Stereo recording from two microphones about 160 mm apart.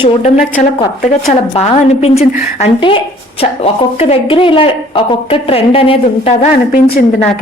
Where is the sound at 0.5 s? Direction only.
55° left (ahead or behind).